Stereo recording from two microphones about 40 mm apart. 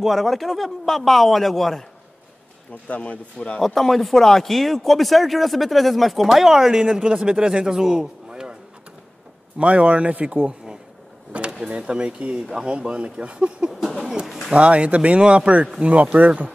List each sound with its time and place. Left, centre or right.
0.0 s speech: centre
2.9 s speech: left
3.6 s speech: centre
6.2 s speech: centre
6.9 s speech: right
9.6 s speech: right
14.2 s bird: centre
14.5 s speech: right